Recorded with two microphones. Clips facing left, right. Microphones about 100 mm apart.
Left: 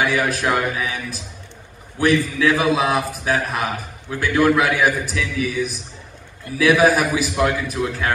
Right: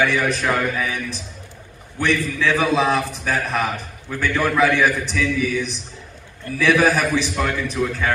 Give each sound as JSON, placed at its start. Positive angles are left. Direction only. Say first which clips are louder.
{"t": 0.0, "sound": "a man's voice", "louder": "even", "side_deg": 10}